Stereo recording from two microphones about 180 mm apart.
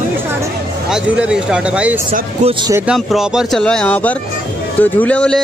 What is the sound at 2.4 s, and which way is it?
Speech, 40° right (ahead or behind).